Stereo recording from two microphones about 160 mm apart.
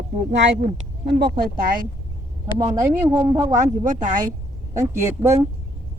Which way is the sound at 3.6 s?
55° right (ahead or behind).